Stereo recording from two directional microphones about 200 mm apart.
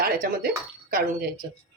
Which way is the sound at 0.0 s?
45° right (ahead or behind).